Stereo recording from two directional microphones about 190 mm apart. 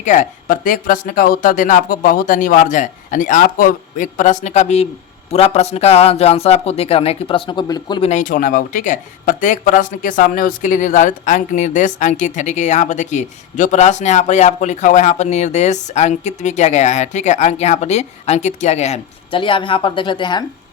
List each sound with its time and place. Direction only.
0.0 s speech: 40° left (ahead or behind); by 8.1 s 25° left (ahead or behind)
8.1 s speech: 45° left (ahead or behind); by 20.4 s 25° left (ahead or behind)